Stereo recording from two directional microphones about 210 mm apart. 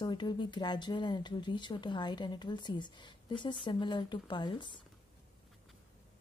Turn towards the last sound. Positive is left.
turn(degrees=20)  # may be behind; listen again after turning